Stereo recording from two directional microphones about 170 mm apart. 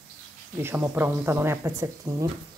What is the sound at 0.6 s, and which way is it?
Speech, 15° right (ahead or behind).